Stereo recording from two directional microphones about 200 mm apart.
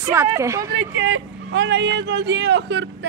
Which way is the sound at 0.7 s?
65° right (ahead or behind).